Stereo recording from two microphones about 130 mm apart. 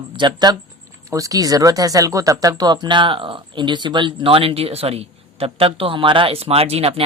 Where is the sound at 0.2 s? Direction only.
35° right (ahead or behind).